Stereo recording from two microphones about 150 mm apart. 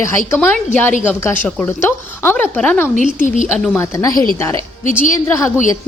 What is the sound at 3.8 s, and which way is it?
A woman's voice, 20° left (ahead or behind).